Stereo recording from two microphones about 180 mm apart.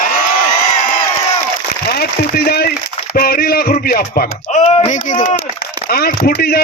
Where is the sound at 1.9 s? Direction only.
60° left (ahead or behind).